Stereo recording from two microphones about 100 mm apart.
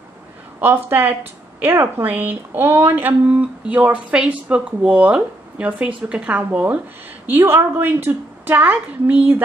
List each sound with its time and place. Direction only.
0.6 s speech: 20° right (ahead or behind)